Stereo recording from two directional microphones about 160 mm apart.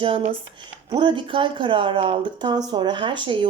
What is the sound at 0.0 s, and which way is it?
Speech, 35° right (ahead or behind).